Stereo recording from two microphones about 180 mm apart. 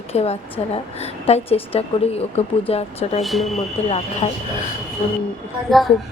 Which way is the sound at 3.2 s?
Centre (ahead or behind).